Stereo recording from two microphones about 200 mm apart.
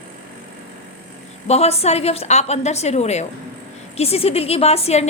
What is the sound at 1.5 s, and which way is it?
A woman's voice, 30° left (ahead or behind).